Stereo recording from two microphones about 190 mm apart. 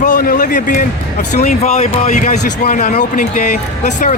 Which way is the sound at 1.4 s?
35° left (ahead or behind).